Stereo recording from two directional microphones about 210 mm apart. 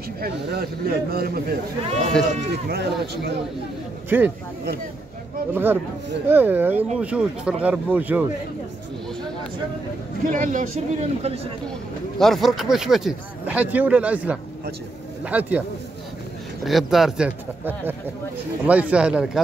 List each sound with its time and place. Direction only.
0.2 s a man's voice: 45° right (ahead or behind)
4.1 s speech: 10° right (ahead or behind)
5.5 s speech: 10° right (ahead or behind)
10.3 s a man's voice: 35° right (ahead or behind)
12.2 s speech: centre (ahead or behind)
16.6 s speech: centre (ahead or behind)